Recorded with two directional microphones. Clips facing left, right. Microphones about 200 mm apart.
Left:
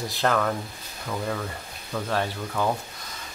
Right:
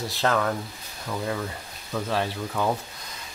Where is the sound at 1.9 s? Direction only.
5° right (ahead or behind).